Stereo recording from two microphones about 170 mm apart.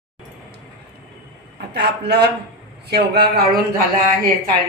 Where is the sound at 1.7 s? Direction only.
75° right (ahead or behind).